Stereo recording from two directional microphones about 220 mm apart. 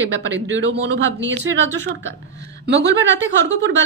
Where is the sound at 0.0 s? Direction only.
60° right (ahead or behind).